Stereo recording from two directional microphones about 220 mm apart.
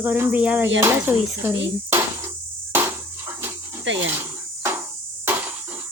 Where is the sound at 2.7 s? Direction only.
10° right (ahead or behind).